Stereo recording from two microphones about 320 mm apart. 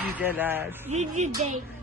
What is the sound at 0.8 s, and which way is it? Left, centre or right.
Speech, right.